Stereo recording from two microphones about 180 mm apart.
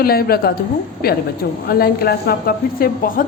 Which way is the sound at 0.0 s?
55° left (ahead or behind).